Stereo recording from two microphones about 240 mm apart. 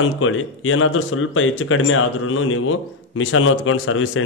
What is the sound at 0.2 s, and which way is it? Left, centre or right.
Speech, left.